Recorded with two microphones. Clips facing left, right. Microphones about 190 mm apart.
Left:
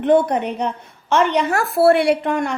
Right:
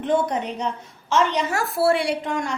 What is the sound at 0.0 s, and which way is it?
A woman's voice, 60° left (ahead or behind).